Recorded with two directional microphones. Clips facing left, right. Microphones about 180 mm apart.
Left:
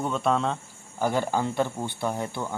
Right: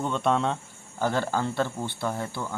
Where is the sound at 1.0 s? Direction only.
15° left (ahead or behind).